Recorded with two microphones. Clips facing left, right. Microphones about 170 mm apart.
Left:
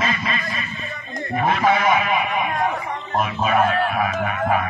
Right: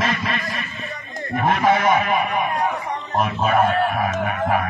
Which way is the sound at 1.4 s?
50° right (ahead or behind).